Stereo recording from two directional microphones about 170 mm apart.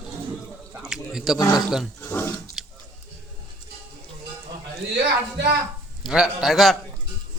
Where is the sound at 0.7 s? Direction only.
5° right (ahead or behind).